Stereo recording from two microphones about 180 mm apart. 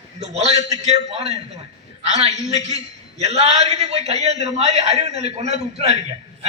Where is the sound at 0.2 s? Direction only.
35° right (ahead or behind).